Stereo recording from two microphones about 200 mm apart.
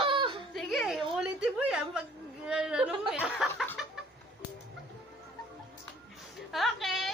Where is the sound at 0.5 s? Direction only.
Centre (ahead or behind).